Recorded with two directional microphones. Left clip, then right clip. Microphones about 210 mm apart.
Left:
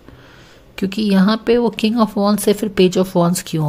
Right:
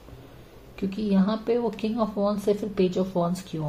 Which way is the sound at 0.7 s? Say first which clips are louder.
Left 9 dB; 50° left (ahead or behind).